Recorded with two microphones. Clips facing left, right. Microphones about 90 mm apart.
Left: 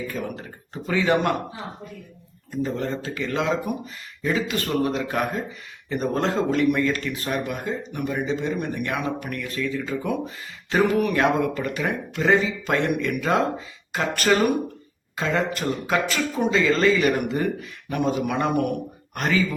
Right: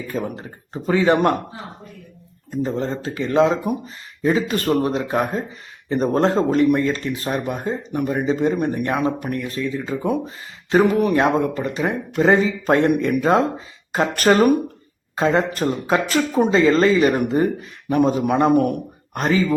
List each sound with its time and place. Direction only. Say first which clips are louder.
0.1 s speech: right 4 dB; 30° right (ahead or behind)
2.5 s speech: right 3 dB; 25° right (ahead or behind)